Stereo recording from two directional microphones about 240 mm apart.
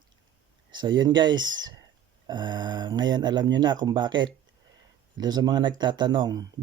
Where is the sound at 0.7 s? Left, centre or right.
Centre.